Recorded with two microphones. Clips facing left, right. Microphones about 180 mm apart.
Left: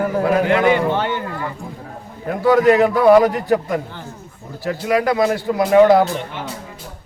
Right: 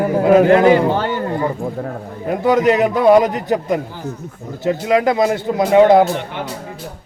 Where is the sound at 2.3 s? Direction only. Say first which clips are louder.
Left 1 dB; 20° right (ahead or behind).